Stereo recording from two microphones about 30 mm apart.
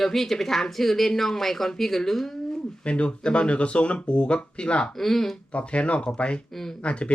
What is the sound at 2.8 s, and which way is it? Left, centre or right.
Speech, left.